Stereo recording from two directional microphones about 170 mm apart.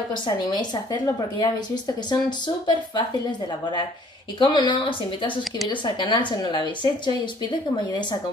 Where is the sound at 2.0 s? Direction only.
25° left (ahead or behind).